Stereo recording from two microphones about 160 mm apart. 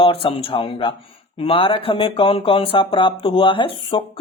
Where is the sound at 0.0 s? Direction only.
35° left (ahead or behind).